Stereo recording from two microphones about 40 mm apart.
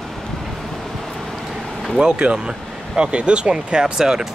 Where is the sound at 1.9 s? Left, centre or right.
Right.